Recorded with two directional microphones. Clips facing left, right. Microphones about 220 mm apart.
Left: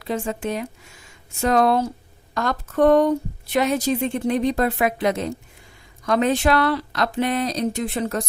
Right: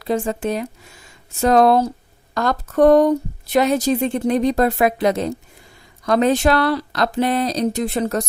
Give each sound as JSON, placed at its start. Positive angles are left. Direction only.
{"t": 0.0, "sound": "speech", "side_deg": -35}